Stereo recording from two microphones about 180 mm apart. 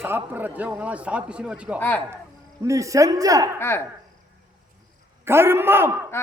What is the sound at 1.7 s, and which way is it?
Speech, 10° left (ahead or behind).